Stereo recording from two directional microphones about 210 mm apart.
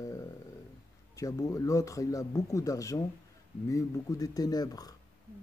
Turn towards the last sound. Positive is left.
turn(degrees=15)  # may be behind; listen again after turning